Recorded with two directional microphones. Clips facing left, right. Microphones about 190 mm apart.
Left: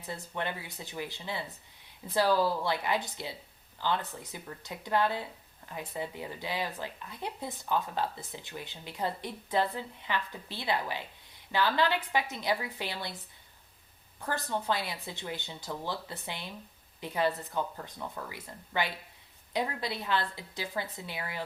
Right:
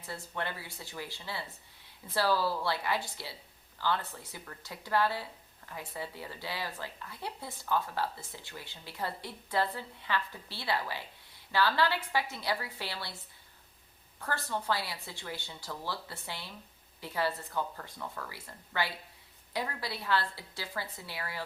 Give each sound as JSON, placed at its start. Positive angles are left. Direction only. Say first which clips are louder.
{"t": 0.0, "sound": "speech", "louder": "left 2 dB", "side_deg": 20}
{"t": 14.2, "sound": "speech", "louder": "left 2 dB", "side_deg": 15}